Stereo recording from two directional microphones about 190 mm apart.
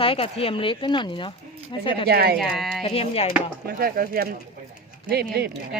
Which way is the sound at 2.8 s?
30° left (ahead or behind).